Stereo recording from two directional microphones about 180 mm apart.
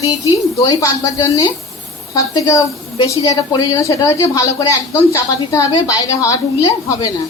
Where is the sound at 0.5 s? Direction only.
20° left (ahead or behind).